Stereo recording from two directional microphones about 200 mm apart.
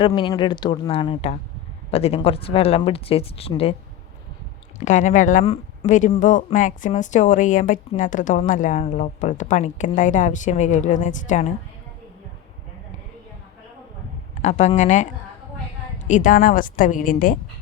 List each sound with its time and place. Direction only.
0.0 s speech: 20° left (ahead or behind)
4.9 s speech: 40° left (ahead or behind)
14.4 s speech: 35° left (ahead or behind)
16.0 s a woman's voice: 40° left (ahead or behind)